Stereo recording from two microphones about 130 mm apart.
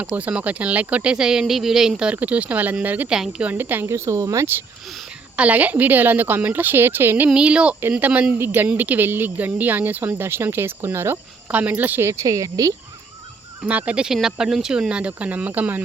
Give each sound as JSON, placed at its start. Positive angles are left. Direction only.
{"t": 0.0, "sound": "speech", "side_deg": -10}
{"t": 13.7, "sound": "speech", "side_deg": -10}